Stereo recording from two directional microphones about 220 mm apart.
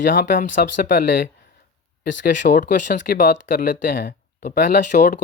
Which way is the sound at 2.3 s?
35° left (ahead or behind).